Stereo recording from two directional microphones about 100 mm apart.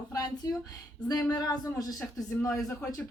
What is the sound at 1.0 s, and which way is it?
A woman's voice, 40° left (ahead or behind).